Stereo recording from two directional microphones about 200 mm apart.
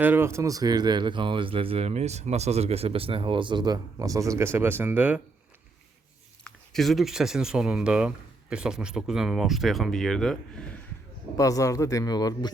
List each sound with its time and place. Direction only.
0.0 s speech: 10° right (ahead or behind)
6.4 s speech: centre (ahead or behind)
11.3 s speech: 15° left (ahead or behind)